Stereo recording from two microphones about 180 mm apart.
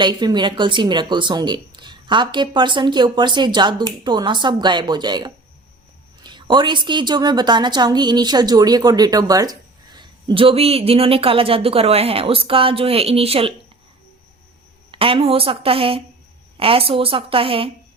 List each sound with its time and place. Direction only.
0.0 s a woman's voice: 25° right (ahead or behind)
14.8 s a woman's voice: 30° right (ahead or behind)